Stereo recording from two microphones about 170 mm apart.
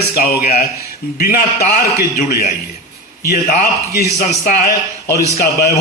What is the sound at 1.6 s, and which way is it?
A man's voice, 50° left (ahead or behind).